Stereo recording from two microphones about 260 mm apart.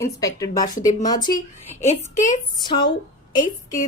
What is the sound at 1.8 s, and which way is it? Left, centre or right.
Speech, left.